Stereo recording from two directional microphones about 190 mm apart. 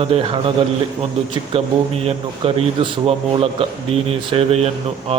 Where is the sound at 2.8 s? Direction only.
30° right (ahead or behind).